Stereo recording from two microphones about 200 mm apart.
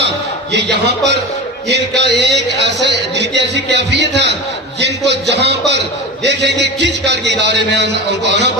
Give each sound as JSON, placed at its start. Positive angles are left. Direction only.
{"t": 1.7, "sound": "a man's voice", "side_deg": -55}